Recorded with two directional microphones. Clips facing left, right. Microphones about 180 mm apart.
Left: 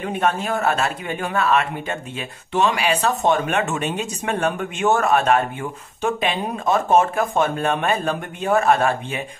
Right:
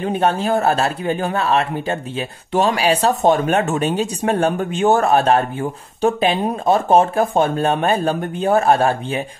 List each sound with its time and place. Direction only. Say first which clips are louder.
0.0 s speech: right 4 dB; 30° right (ahead or behind)